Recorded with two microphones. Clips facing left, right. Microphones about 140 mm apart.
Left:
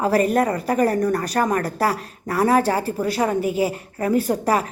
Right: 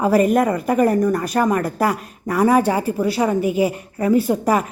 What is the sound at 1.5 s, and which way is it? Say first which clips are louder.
Speech: right 2 dB; 40° left (ahead or behind).